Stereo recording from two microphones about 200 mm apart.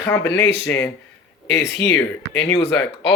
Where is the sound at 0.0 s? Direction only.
15° left (ahead or behind).